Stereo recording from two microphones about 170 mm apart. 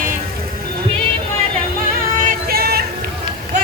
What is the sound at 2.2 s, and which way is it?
Vehicle, 65° right (ahead or behind).